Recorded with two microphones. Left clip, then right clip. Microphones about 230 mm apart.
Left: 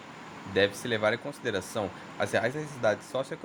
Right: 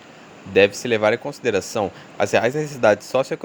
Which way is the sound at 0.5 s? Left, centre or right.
Right.